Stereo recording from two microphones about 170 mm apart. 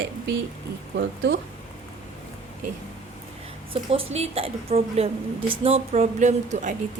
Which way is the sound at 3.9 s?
35° right (ahead or behind).